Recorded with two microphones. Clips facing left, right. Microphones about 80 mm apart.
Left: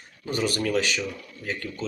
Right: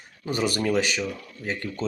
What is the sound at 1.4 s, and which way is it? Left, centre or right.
Speech, right.